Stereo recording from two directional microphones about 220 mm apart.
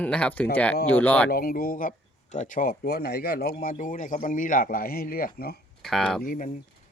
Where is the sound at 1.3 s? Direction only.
40° left (ahead or behind).